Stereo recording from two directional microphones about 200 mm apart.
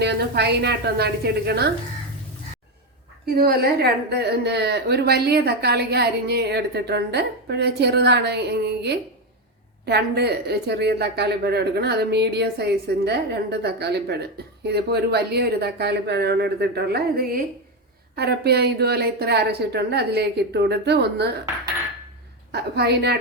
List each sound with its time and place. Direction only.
0.0 s a woman's voice: 55° right (ahead or behind)
3.2 s speech: 50° right (ahead or behind)
22.5 s speech: 55° right (ahead or behind)